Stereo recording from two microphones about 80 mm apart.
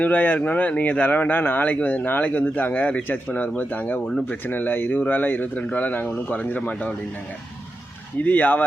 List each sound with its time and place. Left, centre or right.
0.0 s speech: left
8.2 s speech: left